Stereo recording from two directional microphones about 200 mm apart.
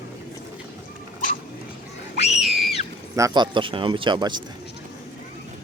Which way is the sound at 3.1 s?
20° right (ahead or behind).